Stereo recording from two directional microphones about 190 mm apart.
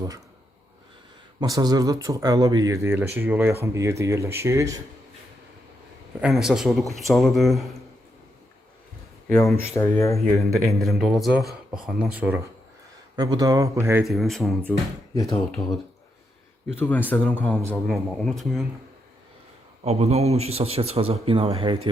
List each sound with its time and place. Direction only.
1.4 s speech: 20° right (ahead or behind)
6.1 s speech: 5° right (ahead or behind)
9.6 s speech: 15° left (ahead or behind)
10.2 s speech: centre (ahead or behind)
13.1 s speech: 20° right (ahead or behind)
14.0 s speech: centre (ahead or behind)
16.8 s speech: 10° left (ahead or behind)
19.8 s a man's voice: 35° right (ahead or behind)